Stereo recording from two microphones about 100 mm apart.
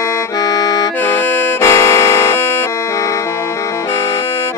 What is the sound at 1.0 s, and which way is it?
Music, 25° left (ahead or behind).